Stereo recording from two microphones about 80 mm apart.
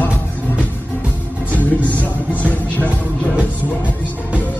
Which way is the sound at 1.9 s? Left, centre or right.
Centre.